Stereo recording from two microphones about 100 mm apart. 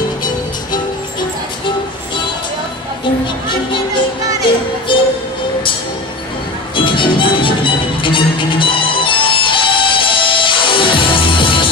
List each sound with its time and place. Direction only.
3.4 s music: 55° left (ahead or behind)
6.8 s music: 55° left (ahead or behind)